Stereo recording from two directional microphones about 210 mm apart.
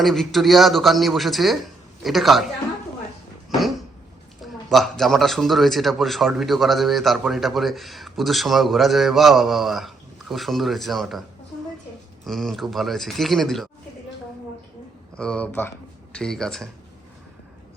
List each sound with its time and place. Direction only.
0.0 s a man's voice: centre (ahead or behind)
4.4 s a man's voice: centre (ahead or behind)
12.2 s a man's voice: centre (ahead or behind)
15.2 s a man's voice: 5° left (ahead or behind)